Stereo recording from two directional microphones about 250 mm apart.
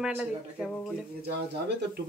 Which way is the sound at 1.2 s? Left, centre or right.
Right.